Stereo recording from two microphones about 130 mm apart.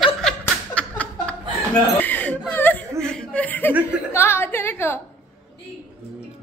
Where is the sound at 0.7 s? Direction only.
10° left (ahead or behind).